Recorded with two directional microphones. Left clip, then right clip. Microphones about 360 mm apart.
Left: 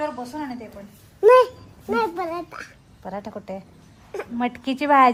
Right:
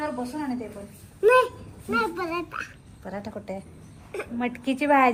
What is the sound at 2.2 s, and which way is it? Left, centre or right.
Speech, left.